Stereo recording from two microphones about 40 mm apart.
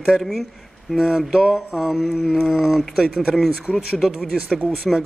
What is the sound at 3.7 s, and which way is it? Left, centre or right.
Speech, left.